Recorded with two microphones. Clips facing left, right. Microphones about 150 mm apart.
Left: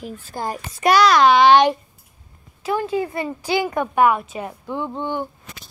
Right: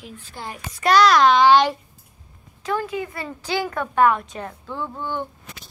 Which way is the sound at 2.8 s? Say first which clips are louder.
Left 5 dB; 35° left (ahead or behind).